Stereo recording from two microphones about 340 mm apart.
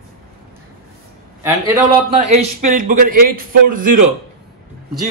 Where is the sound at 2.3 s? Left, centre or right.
Right.